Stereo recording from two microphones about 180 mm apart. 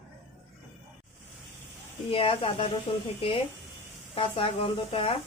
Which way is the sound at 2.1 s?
30° left (ahead or behind).